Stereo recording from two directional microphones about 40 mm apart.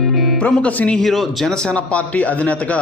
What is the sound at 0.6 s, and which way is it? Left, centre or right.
Speech, left.